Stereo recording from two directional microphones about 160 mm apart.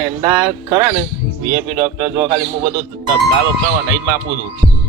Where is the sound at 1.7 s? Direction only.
30° right (ahead or behind).